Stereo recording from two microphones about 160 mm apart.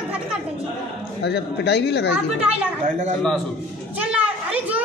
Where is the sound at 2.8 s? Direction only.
50° right (ahead or behind).